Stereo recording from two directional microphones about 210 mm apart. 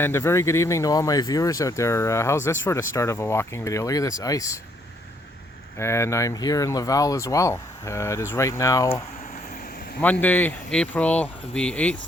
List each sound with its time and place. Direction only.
0.0 s speech: 10° left (ahead or behind)
5.8 s speech: 10° left (ahead or behind)
10.0 s speech: 10° left (ahead or behind)